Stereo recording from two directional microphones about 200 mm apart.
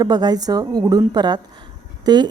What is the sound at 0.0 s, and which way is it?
A woman's voice, 20° right (ahead or behind).